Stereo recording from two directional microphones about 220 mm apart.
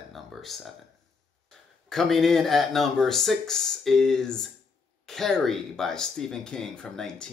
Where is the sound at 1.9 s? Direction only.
Centre (ahead or behind).